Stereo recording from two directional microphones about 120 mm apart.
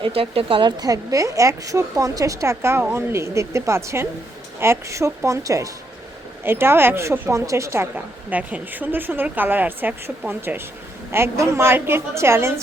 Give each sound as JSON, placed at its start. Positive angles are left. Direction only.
{"t": 0.0, "sound": "speech", "side_deg": -50}
{"t": 0.8, "sound": "a woman's voice", "side_deg": -30}